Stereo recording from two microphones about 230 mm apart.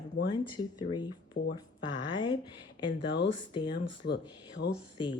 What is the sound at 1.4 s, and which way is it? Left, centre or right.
Speech, left.